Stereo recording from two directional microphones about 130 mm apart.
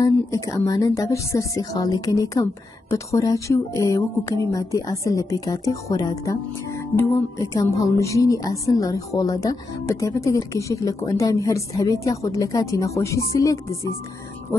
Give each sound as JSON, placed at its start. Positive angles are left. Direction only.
{"t": 0.0, "sound": "speech", "side_deg": 25}